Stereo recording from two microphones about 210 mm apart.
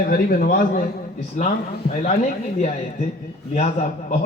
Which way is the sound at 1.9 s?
40° left (ahead or behind).